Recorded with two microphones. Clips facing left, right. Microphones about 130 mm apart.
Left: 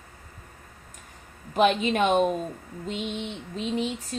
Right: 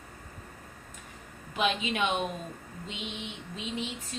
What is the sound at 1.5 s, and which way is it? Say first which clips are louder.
A woman's voice: left 8 dB; 45° left (ahead or behind).